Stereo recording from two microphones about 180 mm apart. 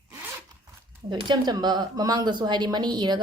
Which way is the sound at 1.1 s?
25° right (ahead or behind).